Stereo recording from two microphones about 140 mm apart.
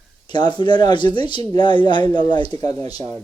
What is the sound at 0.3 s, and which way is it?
Speech, 35° left (ahead or behind).